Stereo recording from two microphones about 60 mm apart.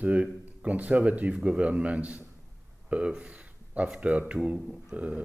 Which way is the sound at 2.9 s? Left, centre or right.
Centre.